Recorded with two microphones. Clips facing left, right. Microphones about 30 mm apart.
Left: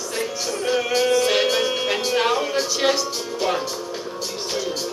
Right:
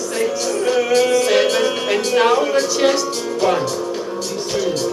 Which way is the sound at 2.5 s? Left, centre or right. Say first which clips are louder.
Right 5 dB; centre.